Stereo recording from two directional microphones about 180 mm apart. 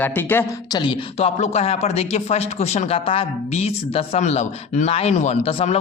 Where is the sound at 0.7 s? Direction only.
25° left (ahead or behind).